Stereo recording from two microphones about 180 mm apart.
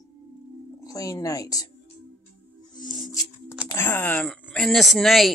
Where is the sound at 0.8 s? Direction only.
20° left (ahead or behind).